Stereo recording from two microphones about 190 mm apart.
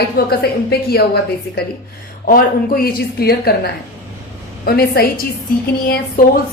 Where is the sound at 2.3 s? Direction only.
50° left (ahead or behind).